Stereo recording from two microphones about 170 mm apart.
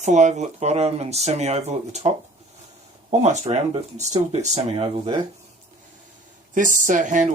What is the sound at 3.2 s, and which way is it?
Speech, 40° right (ahead or behind).